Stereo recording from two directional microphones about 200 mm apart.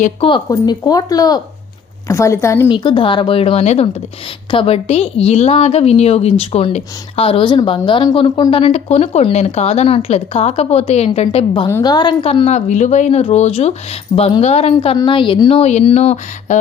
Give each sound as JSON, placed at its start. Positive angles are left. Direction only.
{"t": 0.0, "sound": "a woman's voice", "side_deg": 25}